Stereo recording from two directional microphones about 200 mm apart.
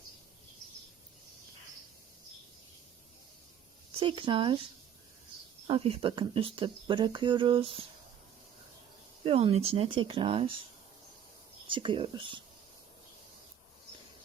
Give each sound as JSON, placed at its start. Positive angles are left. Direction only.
{"t": 4.0, "sound": "speech", "side_deg": -25}
{"t": 5.6, "sound": "speech", "side_deg": -25}
{"t": 9.2, "sound": "speech", "side_deg": -30}
{"t": 11.7, "sound": "speech", "side_deg": -25}